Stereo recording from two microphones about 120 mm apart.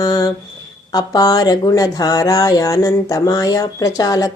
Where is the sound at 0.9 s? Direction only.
30° left (ahead or behind).